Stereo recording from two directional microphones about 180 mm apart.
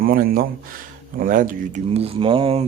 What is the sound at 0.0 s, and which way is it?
Speech, 55° right (ahead or behind).